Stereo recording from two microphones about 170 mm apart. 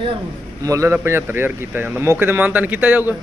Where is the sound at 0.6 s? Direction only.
20° right (ahead or behind).